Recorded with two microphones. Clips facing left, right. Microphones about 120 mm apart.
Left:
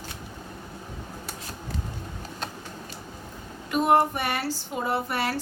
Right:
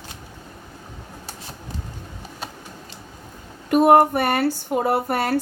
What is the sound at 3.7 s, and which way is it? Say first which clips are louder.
Speech: right 7 dB; 55° right (ahead or behind).